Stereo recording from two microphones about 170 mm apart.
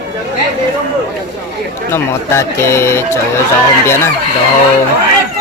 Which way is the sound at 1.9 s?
15° left (ahead or behind).